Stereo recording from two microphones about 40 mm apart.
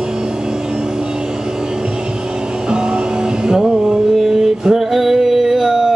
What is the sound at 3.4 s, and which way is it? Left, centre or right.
Music, right.